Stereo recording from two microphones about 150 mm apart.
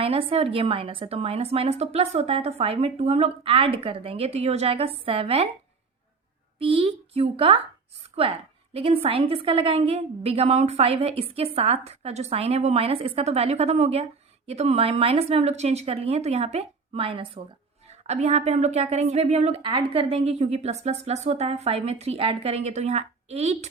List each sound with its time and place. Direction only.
0.0 s a woman's voice: 40° right (ahead or behind)
6.6 s a woman's voice: 35° right (ahead or behind)
18.0 s a woman's voice: 45° right (ahead or behind)